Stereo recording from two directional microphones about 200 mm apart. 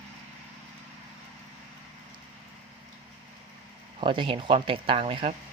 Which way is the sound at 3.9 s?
25° right (ahead or behind).